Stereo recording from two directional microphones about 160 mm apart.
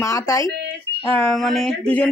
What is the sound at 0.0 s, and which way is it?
Speech, 20° left (ahead or behind).